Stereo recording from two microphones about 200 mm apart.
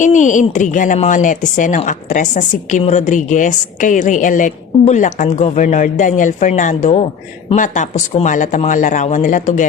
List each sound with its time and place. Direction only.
0.0 s speech: 40° left (ahead or behind)